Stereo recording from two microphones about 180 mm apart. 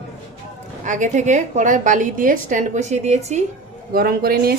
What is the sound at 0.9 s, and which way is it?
A woman's voice, 45° right (ahead or behind).